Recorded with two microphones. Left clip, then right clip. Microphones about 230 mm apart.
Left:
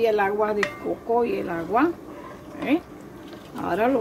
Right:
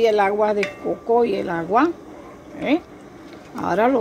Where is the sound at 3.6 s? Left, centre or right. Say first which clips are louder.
Right 4 dB; centre.